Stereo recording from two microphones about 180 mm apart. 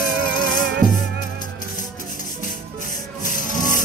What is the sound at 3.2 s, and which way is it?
Rub, 45° left (ahead or behind).